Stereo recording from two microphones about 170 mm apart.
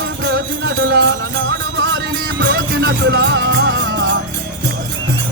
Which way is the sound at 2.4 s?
75° right (ahead or behind).